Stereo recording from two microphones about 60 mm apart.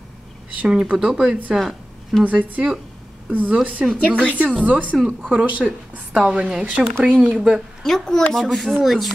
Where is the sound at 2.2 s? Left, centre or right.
Right.